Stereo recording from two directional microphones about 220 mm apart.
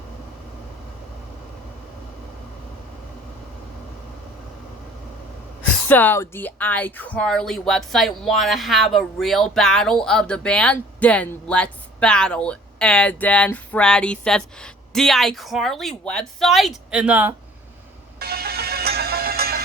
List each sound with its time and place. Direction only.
5.9 s speech: 10° left (ahead or behind)
18.2 s music: 45° right (ahead or behind)